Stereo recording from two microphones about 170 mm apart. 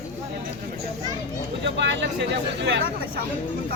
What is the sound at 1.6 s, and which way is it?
Speech, 90° right.